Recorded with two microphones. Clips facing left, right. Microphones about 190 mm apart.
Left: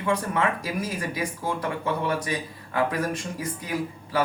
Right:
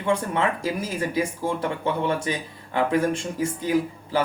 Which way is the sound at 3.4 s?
30° right (ahead or behind).